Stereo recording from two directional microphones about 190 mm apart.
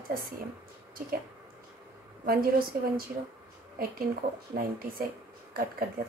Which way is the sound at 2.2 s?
50° right (ahead or behind).